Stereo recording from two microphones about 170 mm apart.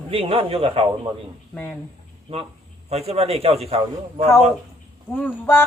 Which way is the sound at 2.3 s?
35° right (ahead or behind).